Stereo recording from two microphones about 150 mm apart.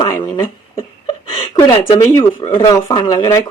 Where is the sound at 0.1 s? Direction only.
20° left (ahead or behind).